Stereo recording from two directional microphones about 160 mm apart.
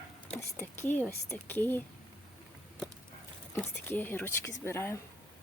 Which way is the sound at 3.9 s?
10° left (ahead or behind).